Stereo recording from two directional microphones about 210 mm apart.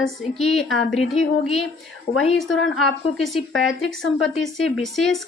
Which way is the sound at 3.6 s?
65° left (ahead or behind).